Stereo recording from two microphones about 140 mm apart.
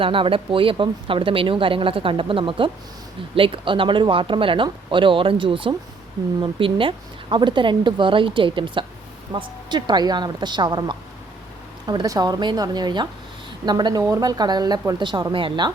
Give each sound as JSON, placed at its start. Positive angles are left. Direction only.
{"t": 0.0, "sound": "a woman's voice", "side_deg": -40}